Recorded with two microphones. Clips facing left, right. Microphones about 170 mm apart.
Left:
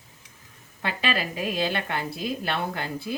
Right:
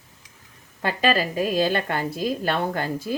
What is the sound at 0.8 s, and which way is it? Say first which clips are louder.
A woman's voice: right 6 dB; 40° right (ahead or behind).